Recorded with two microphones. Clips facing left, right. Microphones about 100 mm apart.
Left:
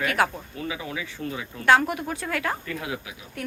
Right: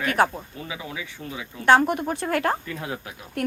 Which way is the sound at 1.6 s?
30° right (ahead or behind).